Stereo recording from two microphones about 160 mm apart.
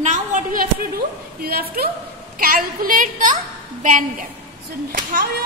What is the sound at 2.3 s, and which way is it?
Mantra, 60° right (ahead or behind).